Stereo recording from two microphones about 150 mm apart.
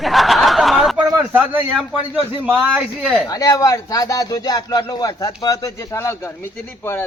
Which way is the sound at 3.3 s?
25° left (ahead or behind).